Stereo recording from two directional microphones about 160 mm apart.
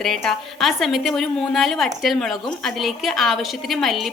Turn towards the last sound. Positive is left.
turn(degrees=0)  # may be behind; listen again after turning